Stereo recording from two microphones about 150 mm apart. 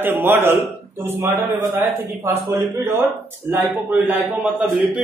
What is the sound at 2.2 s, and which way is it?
Speech, 15° right (ahead or behind).